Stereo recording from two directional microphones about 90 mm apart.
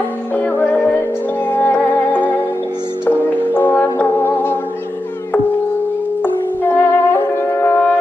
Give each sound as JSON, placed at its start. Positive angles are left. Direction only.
{"t": 0.4, "sound": "music", "side_deg": 20}
{"t": 6.2, "sound": "wind instrument", "side_deg": 25}